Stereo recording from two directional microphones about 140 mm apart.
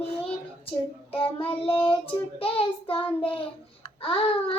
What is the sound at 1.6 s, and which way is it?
Child singing, 40° left (ahead or behind).